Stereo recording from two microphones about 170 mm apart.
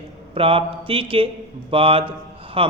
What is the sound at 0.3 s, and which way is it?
A man's voice, 35° right (ahead or behind).